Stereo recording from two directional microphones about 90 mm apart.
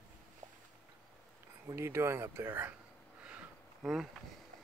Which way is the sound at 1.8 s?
30° right (ahead or behind).